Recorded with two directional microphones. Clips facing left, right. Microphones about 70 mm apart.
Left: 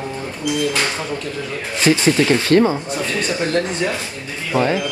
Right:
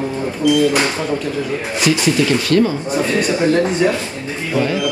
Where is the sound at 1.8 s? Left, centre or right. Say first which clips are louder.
Left 1 dB; left.